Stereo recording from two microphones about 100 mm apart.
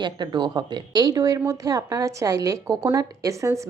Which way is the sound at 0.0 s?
50° right (ahead or behind).